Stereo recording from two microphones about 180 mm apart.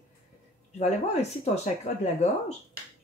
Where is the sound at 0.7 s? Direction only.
40° left (ahead or behind).